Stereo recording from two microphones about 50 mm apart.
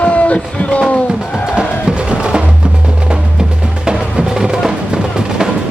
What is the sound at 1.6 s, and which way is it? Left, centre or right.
Music, centre.